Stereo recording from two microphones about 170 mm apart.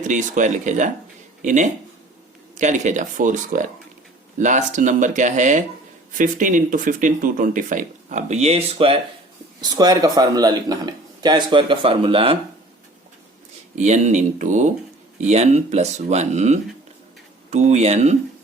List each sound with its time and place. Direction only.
0.0 s speech: 45° right (ahead or behind)
9.6 s a man's voice: 25° right (ahead or behind)
13.7 s speech: 40° right (ahead or behind)